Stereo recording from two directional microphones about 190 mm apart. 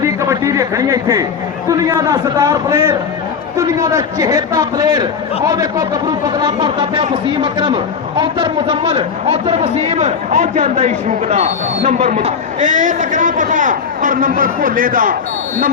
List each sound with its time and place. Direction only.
0.0 s a sound: 15° right (ahead or behind)
1.8 s a man's voice: 20° right (ahead or behind)
8.2 s a man's voice: 25° right (ahead or behind); by 15.1 s 45° right (ahead or behind)